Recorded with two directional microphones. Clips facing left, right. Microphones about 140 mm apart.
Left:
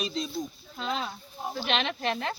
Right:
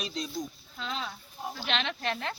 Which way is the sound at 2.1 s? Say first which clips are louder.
Left 3 dB; 5° left (ahead or behind).